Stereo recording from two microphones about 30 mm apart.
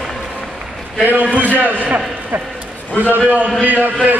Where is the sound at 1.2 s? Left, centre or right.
Right.